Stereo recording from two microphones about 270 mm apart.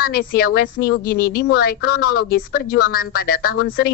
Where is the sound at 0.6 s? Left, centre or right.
Left.